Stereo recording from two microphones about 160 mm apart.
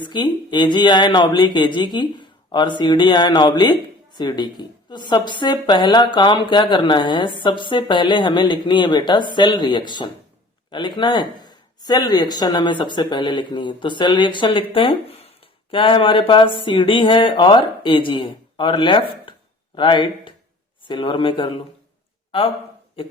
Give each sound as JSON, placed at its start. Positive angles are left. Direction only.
{"t": 0.0, "sound": "speech", "side_deg": 30}